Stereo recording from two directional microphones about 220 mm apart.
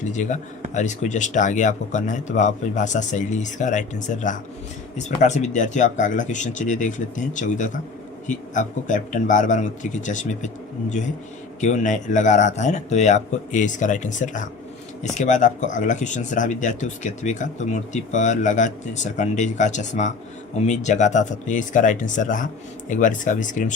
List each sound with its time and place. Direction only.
0.0 s speech: 35° left (ahead or behind)